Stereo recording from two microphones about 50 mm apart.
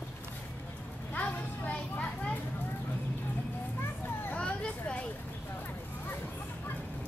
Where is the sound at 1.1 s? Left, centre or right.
Left.